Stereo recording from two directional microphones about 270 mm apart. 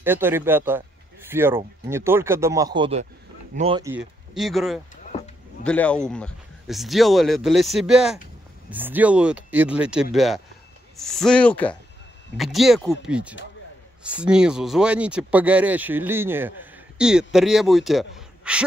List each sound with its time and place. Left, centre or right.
0.0 s speech: centre
3.8 s speech: centre